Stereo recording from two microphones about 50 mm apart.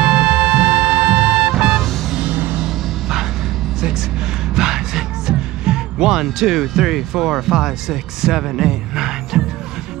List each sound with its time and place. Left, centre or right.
0.1 s music: right
2.3 s music: right
2.6 s music: centre
4.6 s music: centre
6.4 s speech: centre